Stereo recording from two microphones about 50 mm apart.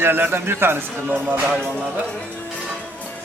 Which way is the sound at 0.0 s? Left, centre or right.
Right.